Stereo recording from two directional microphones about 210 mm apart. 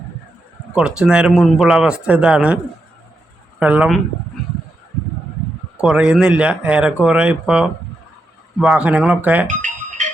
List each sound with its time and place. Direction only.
0.8 s speech: 5° right (ahead or behind)
3.6 s speech: 5° right (ahead or behind)
5.8 s speech: 5° right (ahead or behind)
9.5 s music: 35° right (ahead or behind)